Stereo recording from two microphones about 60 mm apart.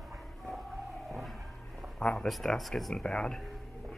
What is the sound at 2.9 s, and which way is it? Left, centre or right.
Speech, centre.